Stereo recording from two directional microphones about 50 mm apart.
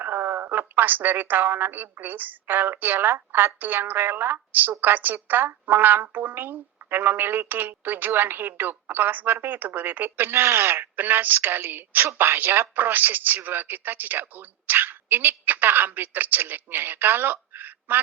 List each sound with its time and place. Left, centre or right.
0.0 s speech: right